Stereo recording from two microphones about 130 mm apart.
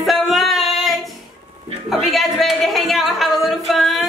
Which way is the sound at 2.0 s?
Centre (ahead or behind).